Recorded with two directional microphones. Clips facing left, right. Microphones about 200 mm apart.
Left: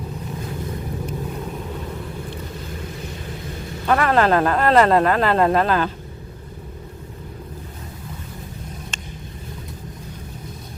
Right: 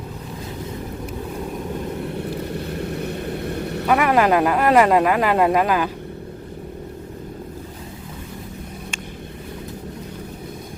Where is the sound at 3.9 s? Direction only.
10° right (ahead or behind).